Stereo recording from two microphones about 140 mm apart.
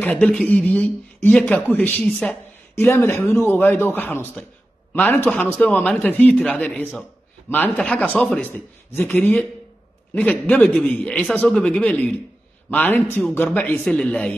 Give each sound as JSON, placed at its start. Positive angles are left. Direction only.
{"t": 0.0, "sound": "a man's voice", "side_deg": 10}
{"t": 2.7, "sound": "a man's voice", "side_deg": 20}